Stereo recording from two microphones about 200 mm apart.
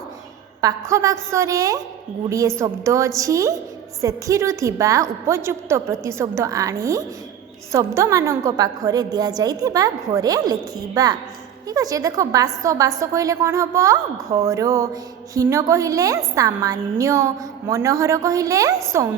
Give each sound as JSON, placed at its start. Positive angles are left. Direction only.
{"t": 0.6, "sound": "a woman's voice", "side_deg": -15}